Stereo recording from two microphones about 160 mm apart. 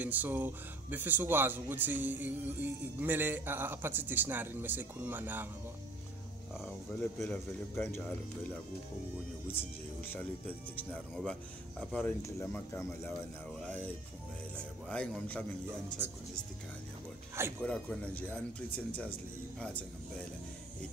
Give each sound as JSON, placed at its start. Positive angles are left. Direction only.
{"t": 0.0, "sound": "speech", "side_deg": -10}
{"t": 7.2, "sound": "speech", "side_deg": 5}
{"t": 10.0, "sound": "speech", "side_deg": 10}
{"t": 17.6, "sound": "speech", "side_deg": 5}